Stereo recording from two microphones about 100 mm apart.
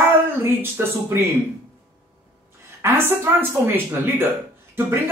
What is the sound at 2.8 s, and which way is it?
Speech, 25° right (ahead or behind).